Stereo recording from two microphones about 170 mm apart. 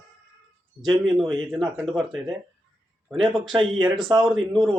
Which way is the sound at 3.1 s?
Centre (ahead or behind).